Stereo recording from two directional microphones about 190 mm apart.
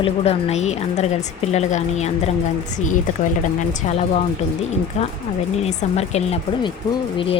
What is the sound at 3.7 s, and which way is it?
A woman's voice, 35° left (ahead or behind).